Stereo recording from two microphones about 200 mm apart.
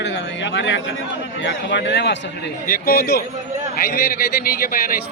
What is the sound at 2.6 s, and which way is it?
A man's voice, 45° left (ahead or behind).